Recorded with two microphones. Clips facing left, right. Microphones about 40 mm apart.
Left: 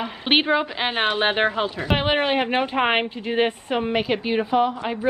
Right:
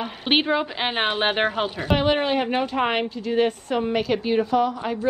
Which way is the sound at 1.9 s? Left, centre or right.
Left.